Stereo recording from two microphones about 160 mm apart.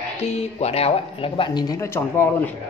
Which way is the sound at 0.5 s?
40° left (ahead or behind).